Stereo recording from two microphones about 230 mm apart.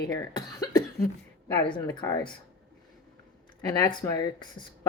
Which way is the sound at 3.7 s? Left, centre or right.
Centre.